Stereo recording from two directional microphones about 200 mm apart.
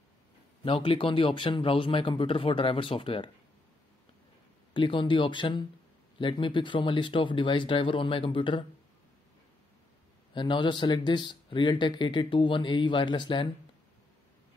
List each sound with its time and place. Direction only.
0.7 s speech: 25° left (ahead or behind)
4.7 s speech: 25° left (ahead or behind)
10.3 s speech: 25° left (ahead or behind)